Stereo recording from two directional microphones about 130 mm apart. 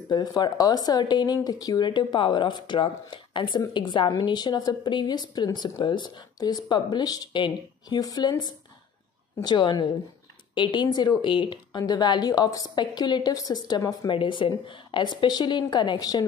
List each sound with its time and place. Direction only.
0.1 s speech: 35° left (ahead or behind)
9.4 s speech: 35° left (ahead or behind)